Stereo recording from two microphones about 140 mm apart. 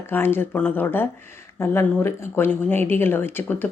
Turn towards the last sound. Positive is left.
turn(degrees=15)  # may be behind; listen again after turning